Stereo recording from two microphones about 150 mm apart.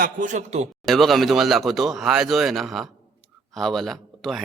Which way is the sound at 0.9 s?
Centre (ahead or behind).